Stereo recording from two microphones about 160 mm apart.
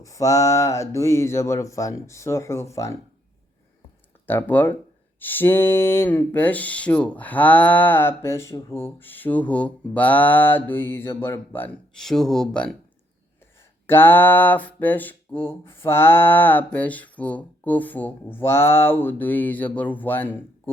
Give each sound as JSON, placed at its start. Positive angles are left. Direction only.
{"t": 0.0, "sound": "speech", "side_deg": 20}
{"t": 4.3, "sound": "speech", "side_deg": 10}
{"t": 13.8, "sound": "speech", "side_deg": 15}